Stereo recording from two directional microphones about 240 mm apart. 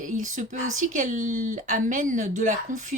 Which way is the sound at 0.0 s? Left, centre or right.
Right.